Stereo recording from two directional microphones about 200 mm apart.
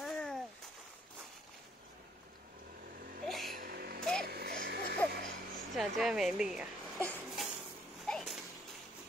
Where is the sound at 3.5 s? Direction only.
50° right (ahead or behind).